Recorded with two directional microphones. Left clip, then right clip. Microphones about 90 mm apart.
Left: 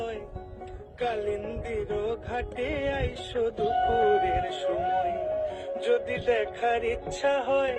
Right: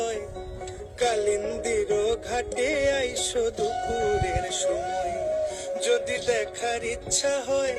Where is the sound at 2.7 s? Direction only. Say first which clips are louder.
Right 7 dB; 25° left (ahead or behind).